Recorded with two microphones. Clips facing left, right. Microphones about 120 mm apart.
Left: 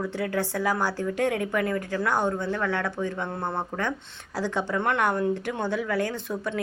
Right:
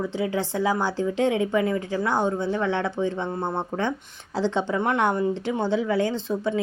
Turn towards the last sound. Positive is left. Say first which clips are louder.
# right 5 dB
turn(degrees=-20)  # may be behind; listen again after turning